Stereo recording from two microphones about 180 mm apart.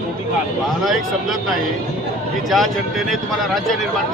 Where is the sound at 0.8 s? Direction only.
Centre (ahead or behind).